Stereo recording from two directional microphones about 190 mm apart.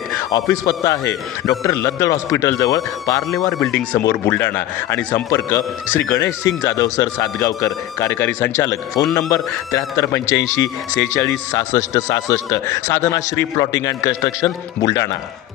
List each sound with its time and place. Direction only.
0.2 s a man's voice: 20° left (ahead or behind)